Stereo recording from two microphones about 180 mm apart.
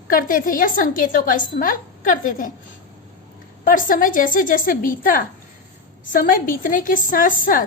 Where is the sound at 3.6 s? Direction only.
50° left (ahead or behind).